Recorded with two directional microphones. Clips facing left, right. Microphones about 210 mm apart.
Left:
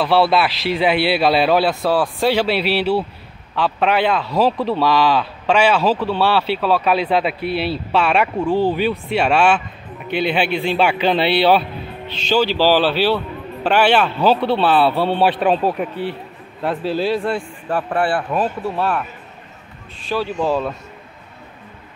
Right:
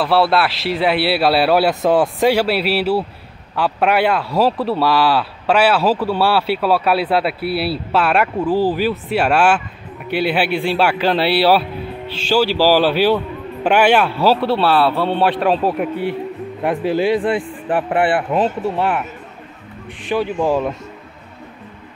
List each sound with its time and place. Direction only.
0.0 s a man's voice: centre (ahead or behind); by 2.3 s 20° right (ahead or behind)
2.3 s a man's voice: 5° right (ahead or behind)